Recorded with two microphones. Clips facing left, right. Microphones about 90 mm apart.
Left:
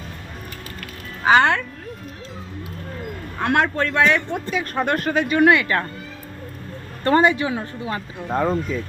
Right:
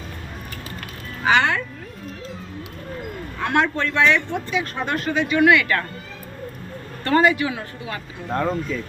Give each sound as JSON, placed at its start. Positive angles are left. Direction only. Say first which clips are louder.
{"t": 1.2, "sound": "speech", "louder": "left 3 dB", "side_deg": 40}
{"t": 3.4, "sound": "speech", "louder": "left 1 dB", "side_deg": 50}
{"t": 7.0, "sound": "speech", "louder": "left 1 dB", "side_deg": 30}
{"t": 8.3, "sound": "speech", "louder": "left 2 dB", "side_deg": 5}